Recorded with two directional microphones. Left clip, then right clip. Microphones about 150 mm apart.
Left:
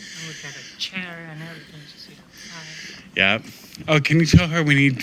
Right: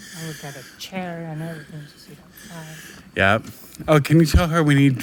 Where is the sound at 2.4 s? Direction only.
60° right (ahead or behind).